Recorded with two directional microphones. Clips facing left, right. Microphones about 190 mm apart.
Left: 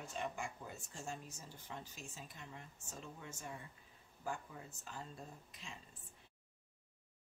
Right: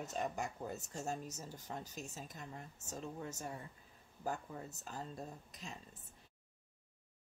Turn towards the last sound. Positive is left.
turn(degrees=-40)  # may be behind; listen again after turning